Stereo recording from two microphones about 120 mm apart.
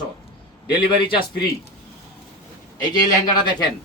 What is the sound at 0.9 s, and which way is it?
Speech, 45° left (ahead or behind).